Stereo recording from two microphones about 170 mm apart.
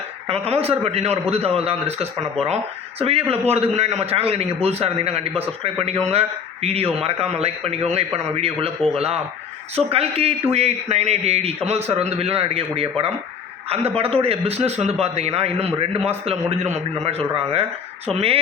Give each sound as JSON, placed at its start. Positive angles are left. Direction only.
{"t": 0.3, "sound": "a man's voice", "side_deg": -35}